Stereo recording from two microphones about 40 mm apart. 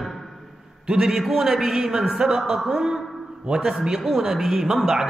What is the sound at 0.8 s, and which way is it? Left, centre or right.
A man's voice, centre.